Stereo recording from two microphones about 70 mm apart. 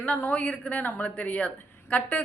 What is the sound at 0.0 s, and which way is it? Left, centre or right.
A woman's voice, left.